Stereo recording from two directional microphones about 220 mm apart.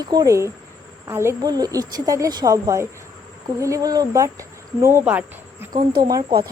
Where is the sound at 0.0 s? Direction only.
15° right (ahead or behind).